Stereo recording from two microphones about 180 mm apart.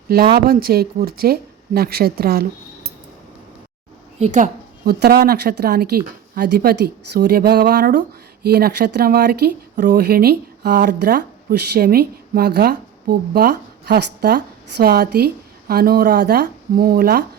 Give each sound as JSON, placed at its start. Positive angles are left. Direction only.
{"t": 0.3, "sound": "speech", "side_deg": -60}
{"t": 4.2, "sound": "a woman's voice", "side_deg": -45}
{"t": 4.9, "sound": "speech", "side_deg": -60}